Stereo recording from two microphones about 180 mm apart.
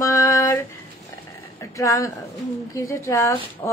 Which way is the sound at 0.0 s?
15° left (ahead or behind).